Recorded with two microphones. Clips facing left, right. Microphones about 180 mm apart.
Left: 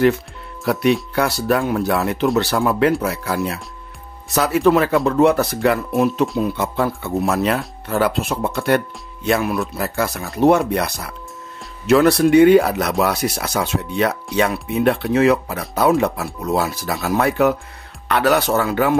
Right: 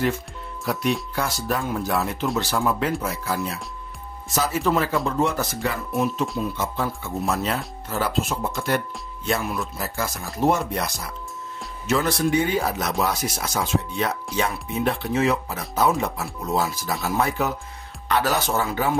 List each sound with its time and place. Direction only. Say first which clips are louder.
0.7 s speech: left 7 dB; 65° left (ahead or behind)